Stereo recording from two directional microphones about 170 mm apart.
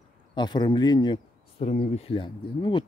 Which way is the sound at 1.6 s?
45° left (ahead or behind).